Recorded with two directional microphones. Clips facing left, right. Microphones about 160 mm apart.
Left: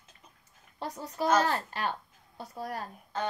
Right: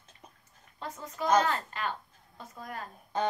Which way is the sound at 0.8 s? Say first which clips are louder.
Left 3 dB; 35° left (ahead or behind).